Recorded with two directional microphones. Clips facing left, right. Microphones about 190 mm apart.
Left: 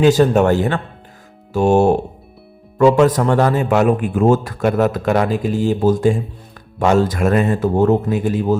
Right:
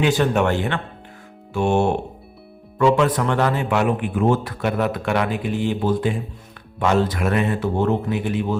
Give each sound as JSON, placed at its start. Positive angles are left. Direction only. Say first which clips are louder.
{"t": 0.0, "sound": "a man's voice", "louder": "left 6 dB", "side_deg": 40}